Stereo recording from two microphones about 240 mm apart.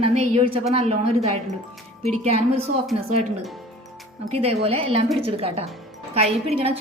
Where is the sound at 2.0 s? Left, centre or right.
Right.